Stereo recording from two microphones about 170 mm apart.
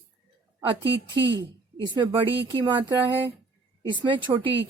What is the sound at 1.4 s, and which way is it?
A woman's voice, 25° right (ahead or behind).